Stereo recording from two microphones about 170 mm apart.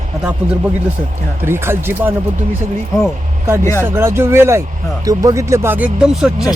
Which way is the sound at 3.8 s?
15° right (ahead or behind).